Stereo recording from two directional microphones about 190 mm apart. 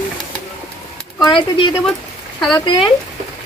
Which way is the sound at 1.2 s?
25° left (ahead or behind).